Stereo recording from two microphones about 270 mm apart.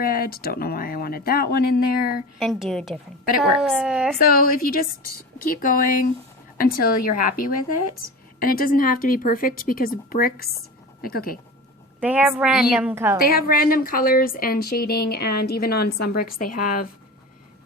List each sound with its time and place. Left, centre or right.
0.0 s speech: left
2.4 s a woman's voice: centre
4.2 s speech: left
11.9 s a woman's voice: centre
13.1 s speech: left
16.6 s speech: left